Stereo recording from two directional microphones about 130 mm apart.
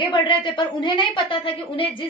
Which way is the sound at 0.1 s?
40° left (ahead or behind).